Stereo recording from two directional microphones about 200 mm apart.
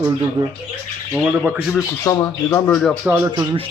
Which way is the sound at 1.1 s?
10° right (ahead or behind).